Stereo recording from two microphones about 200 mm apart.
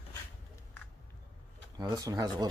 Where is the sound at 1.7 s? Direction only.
20° right (ahead or behind).